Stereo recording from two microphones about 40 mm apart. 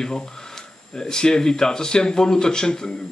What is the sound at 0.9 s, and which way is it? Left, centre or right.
Speech, centre.